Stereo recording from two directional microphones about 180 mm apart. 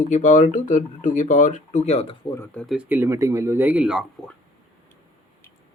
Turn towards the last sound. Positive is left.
turn(degrees=-5)  # may be behind; listen again after turning